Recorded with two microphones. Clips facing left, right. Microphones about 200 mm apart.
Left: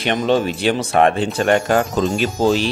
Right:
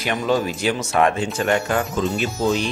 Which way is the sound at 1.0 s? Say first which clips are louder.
Left 3 dB; 35° left (ahead or behind).